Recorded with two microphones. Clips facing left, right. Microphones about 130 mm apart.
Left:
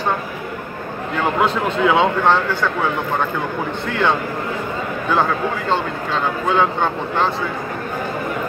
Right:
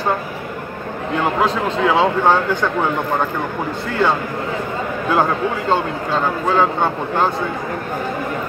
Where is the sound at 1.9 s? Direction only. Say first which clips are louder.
Right 3 dB; 10° right (ahead or behind).